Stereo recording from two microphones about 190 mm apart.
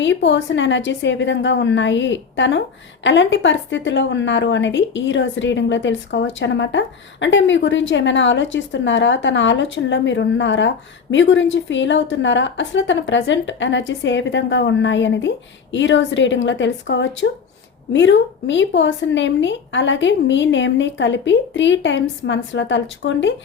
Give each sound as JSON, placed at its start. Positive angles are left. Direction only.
{"t": 0.0, "sound": "a woman's voice", "side_deg": 70}